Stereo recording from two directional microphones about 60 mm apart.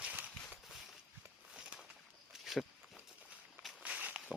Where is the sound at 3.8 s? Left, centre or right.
Right.